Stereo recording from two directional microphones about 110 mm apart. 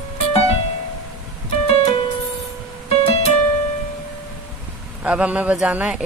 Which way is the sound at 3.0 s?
65° left (ahead or behind).